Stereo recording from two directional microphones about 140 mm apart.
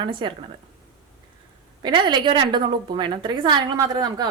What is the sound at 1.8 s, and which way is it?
A woman's voice, 30° right (ahead or behind).